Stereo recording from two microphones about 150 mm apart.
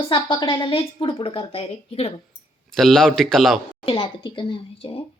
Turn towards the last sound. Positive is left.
turn(degrees=35)  # may be behind; listen again after turning